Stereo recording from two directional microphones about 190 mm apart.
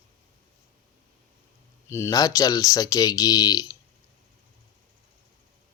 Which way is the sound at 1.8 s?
15° left (ahead or behind).